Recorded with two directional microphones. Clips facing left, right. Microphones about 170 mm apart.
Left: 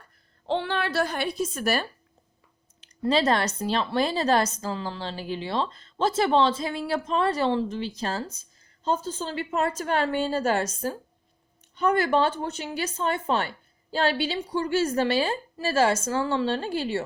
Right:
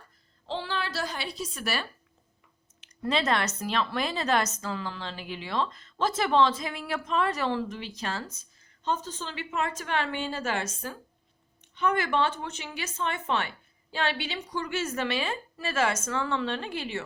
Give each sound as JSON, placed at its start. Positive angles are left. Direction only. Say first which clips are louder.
{"t": 0.4, "sound": "a woman's voice", "louder": "left 6 dB", "side_deg": 60}
{"t": 2.8, "sound": "a woman's voice", "louder": "left 5 dB", "side_deg": 35}